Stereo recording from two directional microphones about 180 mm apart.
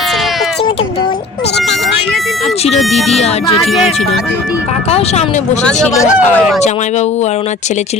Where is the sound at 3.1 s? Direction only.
35° left (ahead or behind).